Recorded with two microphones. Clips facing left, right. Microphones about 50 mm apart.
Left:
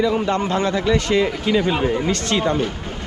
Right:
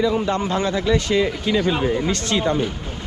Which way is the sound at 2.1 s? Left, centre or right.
Left.